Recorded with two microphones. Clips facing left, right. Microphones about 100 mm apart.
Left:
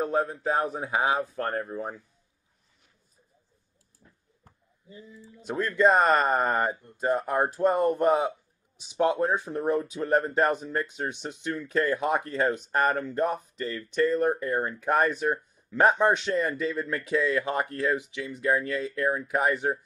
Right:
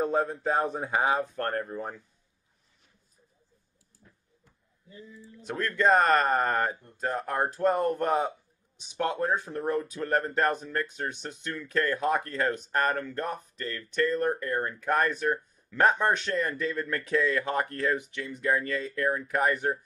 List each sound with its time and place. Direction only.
0.0 s speech: centre (ahead or behind)
4.0 s a sound: 30° left (ahead or behind)
5.5 s speech: 10° left (ahead or behind)
14.4 s speech: 15° left (ahead or behind)